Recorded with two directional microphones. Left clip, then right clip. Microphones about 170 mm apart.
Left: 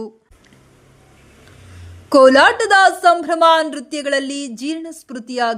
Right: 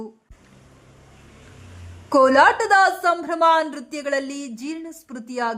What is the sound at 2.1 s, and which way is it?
A woman's voice, 15° left (ahead or behind).